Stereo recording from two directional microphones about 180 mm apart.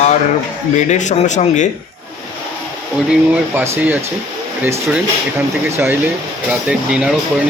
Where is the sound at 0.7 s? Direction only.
40° left (ahead or behind).